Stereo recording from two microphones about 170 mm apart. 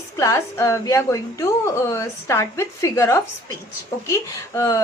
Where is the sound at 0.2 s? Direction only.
15° left (ahead or behind).